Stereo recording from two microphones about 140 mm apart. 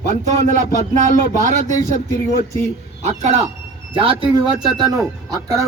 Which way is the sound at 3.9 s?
40° right (ahead or behind).